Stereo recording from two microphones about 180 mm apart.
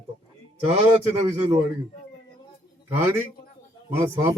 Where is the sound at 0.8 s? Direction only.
10° right (ahead or behind).